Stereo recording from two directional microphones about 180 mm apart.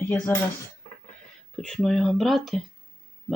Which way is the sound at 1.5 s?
Centre (ahead or behind).